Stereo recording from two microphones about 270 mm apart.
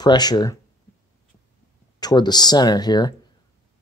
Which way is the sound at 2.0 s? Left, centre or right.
Centre.